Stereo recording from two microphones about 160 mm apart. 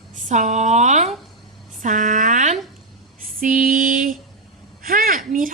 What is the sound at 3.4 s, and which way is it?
Female singing, 55° right (ahead or behind).